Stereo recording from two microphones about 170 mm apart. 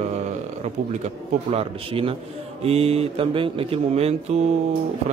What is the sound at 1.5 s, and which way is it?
A man's voice, 35° right (ahead or behind).